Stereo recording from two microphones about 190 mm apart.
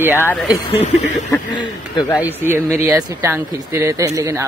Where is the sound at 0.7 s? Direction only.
35° left (ahead or behind).